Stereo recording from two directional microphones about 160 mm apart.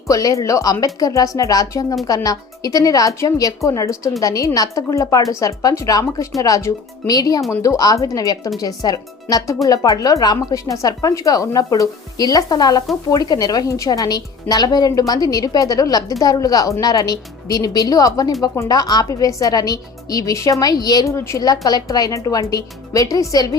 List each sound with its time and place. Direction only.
0.1 s speech: 20° left (ahead or behind)